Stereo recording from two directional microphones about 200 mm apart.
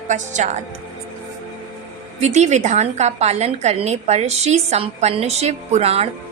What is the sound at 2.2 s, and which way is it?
A woman's voice, 35° right (ahead or behind).